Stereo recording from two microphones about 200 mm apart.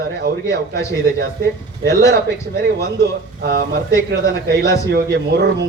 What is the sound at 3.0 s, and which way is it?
A man's voice, 55° right (ahead or behind).